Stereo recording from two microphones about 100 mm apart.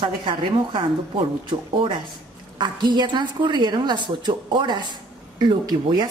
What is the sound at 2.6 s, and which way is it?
A woman's voice, 50° right (ahead or behind).